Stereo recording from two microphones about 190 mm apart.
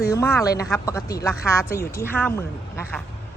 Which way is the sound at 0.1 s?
15° left (ahead or behind).